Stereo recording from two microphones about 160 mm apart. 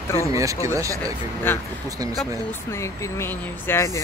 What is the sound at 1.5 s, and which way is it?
Speech, 10° left (ahead or behind).